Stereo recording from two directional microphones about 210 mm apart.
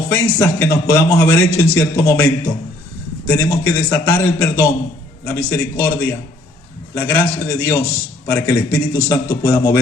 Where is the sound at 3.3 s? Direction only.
10° left (ahead or behind).